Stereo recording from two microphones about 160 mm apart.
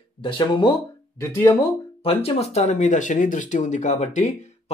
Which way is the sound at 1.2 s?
15° left (ahead or behind).